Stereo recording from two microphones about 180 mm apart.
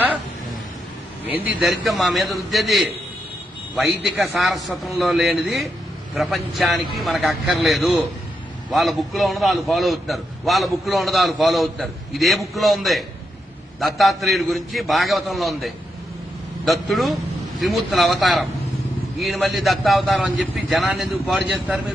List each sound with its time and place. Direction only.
1.5 s a man's voice: 5° right (ahead or behind)